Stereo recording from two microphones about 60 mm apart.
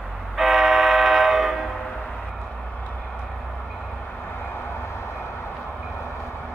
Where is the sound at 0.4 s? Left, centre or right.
Centre.